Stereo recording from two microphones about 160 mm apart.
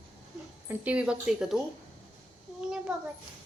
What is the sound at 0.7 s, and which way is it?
Speech, 10° right (ahead or behind).